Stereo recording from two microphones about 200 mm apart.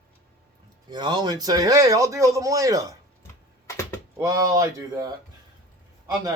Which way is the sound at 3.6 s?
15° left (ahead or behind).